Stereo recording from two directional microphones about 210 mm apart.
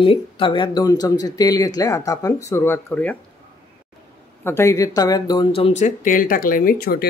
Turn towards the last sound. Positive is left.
turn(degrees=45)  # may be behind; listen again after turning